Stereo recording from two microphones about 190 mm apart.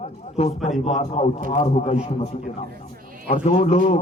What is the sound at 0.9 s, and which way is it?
Speech, 35° left (ahead or behind).